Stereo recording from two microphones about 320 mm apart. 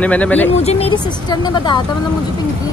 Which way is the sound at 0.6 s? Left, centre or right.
Centre.